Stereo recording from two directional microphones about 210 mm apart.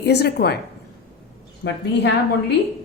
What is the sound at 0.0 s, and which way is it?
Speech, 50° left (ahead or behind).